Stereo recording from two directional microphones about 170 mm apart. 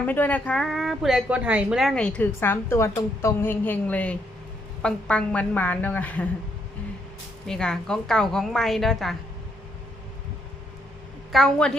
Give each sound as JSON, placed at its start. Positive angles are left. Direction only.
{"t": 0.0, "sound": "a woman's voice", "side_deg": 10}
{"t": 7.4, "sound": "a woman's voice", "side_deg": 5}
{"t": 11.3, "sound": "a woman's voice", "side_deg": 0}